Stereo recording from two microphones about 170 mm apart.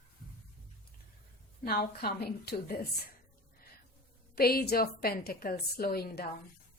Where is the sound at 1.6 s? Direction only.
65° left (ahead or behind).